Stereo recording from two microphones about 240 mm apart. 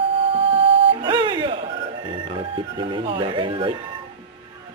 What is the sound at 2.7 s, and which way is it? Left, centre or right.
Speech, right.